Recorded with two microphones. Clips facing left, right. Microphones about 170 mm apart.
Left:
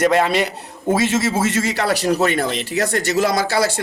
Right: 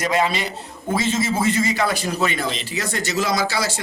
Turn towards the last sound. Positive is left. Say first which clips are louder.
# left 4 dB
turn(degrees=60)  # may be behind; listen again after turning